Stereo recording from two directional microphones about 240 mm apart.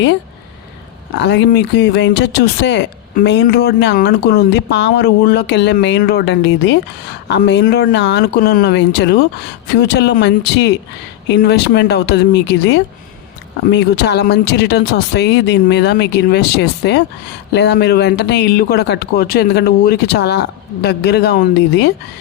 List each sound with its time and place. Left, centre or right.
1.2 s speech: left